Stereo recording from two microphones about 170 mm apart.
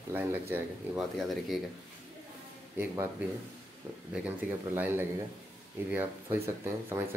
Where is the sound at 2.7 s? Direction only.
15° right (ahead or behind).